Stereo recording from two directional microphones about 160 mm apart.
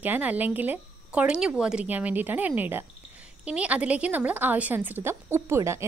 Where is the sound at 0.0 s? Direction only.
10° right (ahead or behind).